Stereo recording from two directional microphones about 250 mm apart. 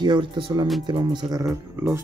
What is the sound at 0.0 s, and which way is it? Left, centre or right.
Speech, centre.